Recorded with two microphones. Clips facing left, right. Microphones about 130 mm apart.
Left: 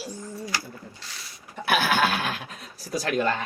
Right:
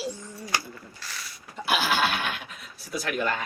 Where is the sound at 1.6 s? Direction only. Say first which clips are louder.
Left 2 dB; 55° left (ahead or behind); by 3.3 s 35° left (ahead or behind).